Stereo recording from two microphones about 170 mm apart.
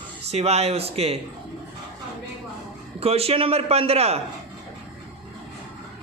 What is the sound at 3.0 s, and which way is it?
A man's voice, 35° right (ahead or behind).